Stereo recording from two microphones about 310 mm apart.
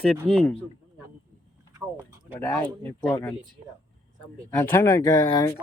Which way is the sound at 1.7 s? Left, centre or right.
Centre.